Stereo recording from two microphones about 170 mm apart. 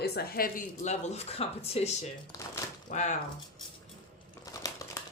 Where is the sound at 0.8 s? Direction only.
40° left (ahead or behind).